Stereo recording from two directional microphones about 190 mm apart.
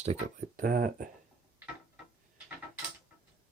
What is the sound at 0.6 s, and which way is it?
Speech, 50° right (ahead or behind).